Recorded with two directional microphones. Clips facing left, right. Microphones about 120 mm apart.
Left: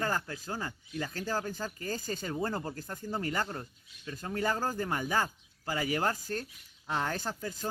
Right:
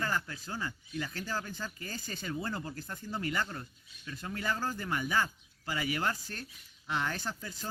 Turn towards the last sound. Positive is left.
turn(degrees=45)  # may be behind; listen again after turning